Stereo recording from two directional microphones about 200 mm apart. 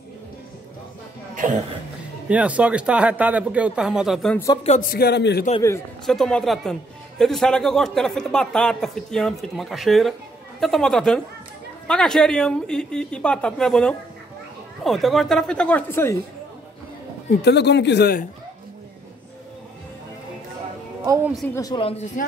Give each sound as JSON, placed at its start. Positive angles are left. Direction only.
{"t": 1.3, "sound": "cough", "side_deg": -40}
{"t": 2.2, "sound": "speech", "side_deg": -5}
{"t": 4.6, "sound": "a man's voice", "side_deg": 45}
{"t": 6.0, "sound": "speech", "side_deg": 5}
{"t": 17.3, "sound": "speech", "side_deg": 55}
{"t": 21.0, "sound": "a woman's voice", "side_deg": -15}
{"t": 21.5, "sound": "speech", "side_deg": 20}